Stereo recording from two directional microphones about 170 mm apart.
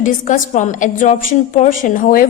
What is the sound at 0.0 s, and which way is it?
A woman's voice, 50° left (ahead or behind).